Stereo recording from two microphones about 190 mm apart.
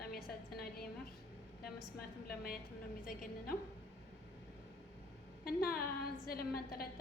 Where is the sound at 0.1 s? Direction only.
55° left (ahead or behind).